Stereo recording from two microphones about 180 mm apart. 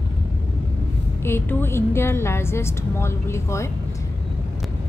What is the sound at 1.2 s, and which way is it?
A woman's voice, 10° left (ahead or behind).